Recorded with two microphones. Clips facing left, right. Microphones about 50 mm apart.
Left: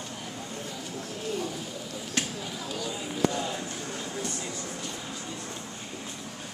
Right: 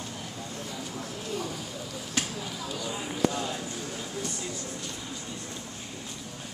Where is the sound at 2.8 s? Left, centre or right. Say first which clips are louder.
Even; centre.